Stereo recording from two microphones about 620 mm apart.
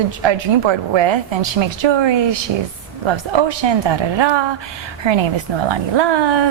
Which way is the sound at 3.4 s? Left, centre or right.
Right.